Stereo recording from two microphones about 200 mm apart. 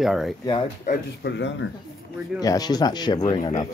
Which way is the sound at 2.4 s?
20° left (ahead or behind).